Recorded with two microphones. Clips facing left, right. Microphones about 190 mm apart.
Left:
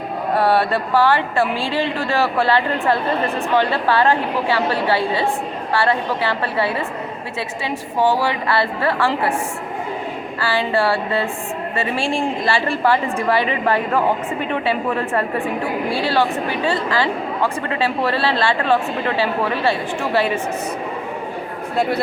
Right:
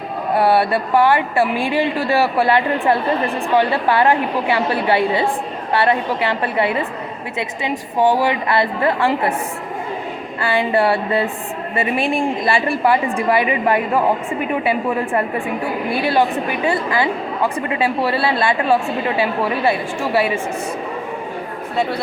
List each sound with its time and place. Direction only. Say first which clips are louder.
0.3 s a woman's voice: right 2 dB; 15° right (ahead or behind)
10.4 s a woman's voice: right 2 dB; 20° right (ahead or behind)